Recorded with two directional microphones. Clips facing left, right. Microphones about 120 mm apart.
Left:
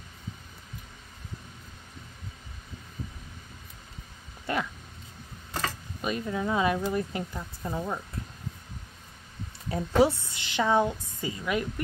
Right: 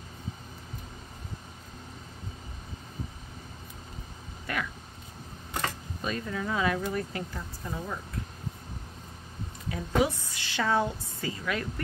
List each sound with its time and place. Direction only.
4.5 s speech: 25° left (ahead or behind)
6.0 s speech: 20° left (ahead or behind)
9.7 s speech: 30° left (ahead or behind)